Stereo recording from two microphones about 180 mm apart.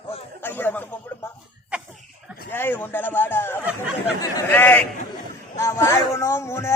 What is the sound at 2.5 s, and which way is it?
A man's voice, 10° left (ahead or behind).